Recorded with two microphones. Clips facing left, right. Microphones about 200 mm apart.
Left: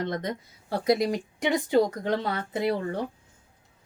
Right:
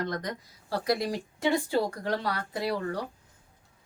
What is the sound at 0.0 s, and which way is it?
Speech, 25° left (ahead or behind).